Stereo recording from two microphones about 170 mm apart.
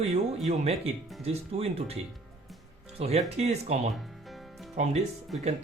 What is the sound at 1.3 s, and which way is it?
Speech, 35° right (ahead or behind).